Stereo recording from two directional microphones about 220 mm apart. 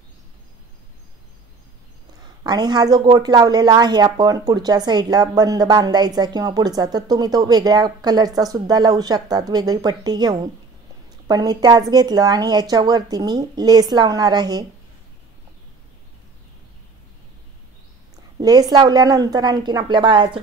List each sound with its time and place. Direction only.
2.4 s a woman's voice: 20° right (ahead or behind)
18.4 s a woman's voice: 20° right (ahead or behind)